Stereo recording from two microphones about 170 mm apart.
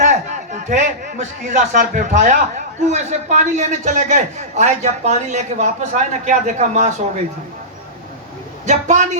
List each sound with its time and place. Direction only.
0.0 s a sound: 45° right (ahead or behind)
1.5 s a man's voice: 50° right (ahead or behind)
8.6 s a man's voice: 45° right (ahead or behind)